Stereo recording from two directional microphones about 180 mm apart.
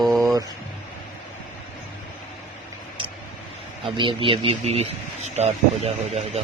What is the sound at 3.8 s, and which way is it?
Speech, 30° right (ahead or behind).